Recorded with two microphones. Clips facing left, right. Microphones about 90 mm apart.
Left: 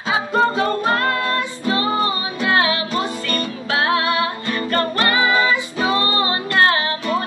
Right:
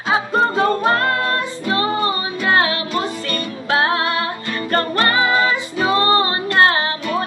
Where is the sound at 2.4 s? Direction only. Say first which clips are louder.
Right 1 dB; 35° right (ahead or behind).